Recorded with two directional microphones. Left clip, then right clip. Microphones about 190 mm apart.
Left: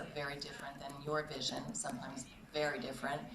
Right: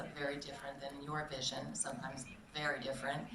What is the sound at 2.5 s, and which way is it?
Speech, 30° left (ahead or behind).